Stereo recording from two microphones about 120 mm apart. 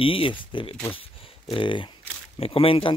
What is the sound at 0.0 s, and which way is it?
Speech, 50° left (ahead or behind).